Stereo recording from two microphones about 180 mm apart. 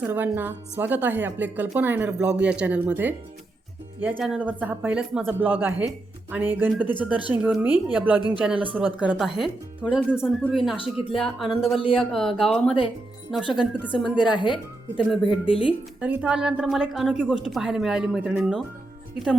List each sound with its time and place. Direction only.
0.0 s speech: 10° right (ahead or behind)
4.2 s a woman's voice: 5° right (ahead or behind)
13.9 s a woman's voice: 25° left (ahead or behind)
16.0 s a woman's voice: 10° right (ahead or behind)